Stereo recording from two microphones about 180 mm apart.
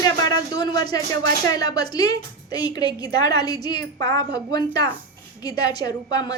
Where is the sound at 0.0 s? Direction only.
20° left (ahead or behind).